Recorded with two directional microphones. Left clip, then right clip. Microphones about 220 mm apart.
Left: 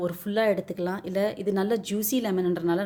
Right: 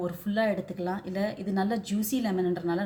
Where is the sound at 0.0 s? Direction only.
45° left (ahead or behind).